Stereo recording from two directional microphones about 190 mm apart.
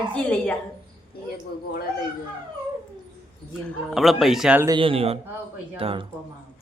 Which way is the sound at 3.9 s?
Centre (ahead or behind).